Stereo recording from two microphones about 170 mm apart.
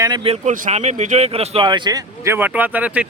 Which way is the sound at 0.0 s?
25° right (ahead or behind).